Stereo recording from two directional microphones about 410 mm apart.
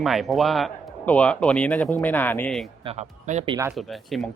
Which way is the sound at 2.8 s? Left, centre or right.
Centre.